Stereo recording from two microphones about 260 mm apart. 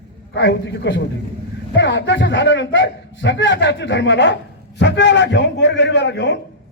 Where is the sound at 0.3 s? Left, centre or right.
Left.